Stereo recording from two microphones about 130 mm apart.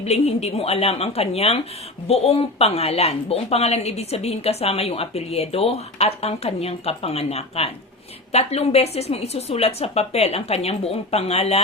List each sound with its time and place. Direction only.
0.0 s a woman's voice: 55° left (ahead or behind)